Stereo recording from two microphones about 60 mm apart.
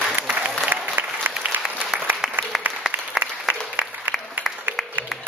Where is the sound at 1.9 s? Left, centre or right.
Centre.